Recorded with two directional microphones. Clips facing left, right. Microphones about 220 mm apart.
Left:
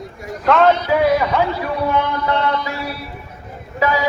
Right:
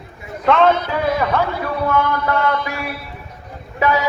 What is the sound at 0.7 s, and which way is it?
Speech, 50° right (ahead or behind).